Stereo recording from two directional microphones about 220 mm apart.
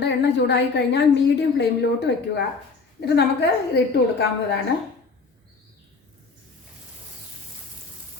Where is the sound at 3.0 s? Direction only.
50° left (ahead or behind).